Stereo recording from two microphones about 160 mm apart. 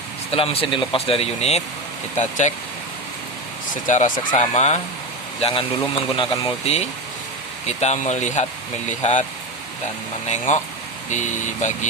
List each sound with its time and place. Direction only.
0.3 s speech: 35° left (ahead or behind)
3.8 s speech: 50° left (ahead or behind)
10.2 s speech: 45° left (ahead or behind)